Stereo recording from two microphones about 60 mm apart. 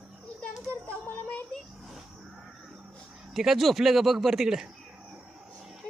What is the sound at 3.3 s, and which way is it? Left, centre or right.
Speech, centre.